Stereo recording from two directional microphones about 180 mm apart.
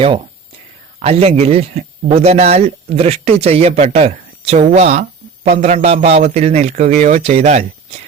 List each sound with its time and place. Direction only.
0.9 s speech: 35° right (ahead or behind)